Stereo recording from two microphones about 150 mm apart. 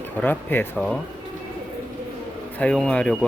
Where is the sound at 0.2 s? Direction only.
10° left (ahead or behind).